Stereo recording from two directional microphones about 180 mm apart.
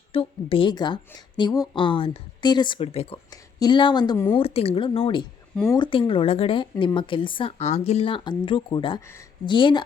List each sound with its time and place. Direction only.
0.1 s speech: 30° left (ahead or behind)
4.4 s speech: 35° left (ahead or behind)
9.0 s speech: 15° left (ahead or behind)
9.5 s speech: 25° left (ahead or behind)